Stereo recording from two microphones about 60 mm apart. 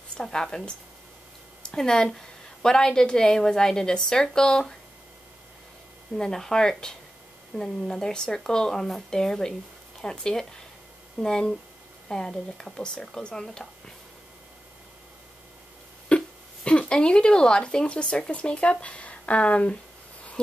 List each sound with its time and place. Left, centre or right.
0.2 s speech: centre
6.1 s speech: centre
16.1 s a sound: left
16.6 s speech: centre